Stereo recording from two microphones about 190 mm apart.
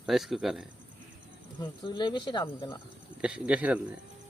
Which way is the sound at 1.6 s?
25° left (ahead or behind).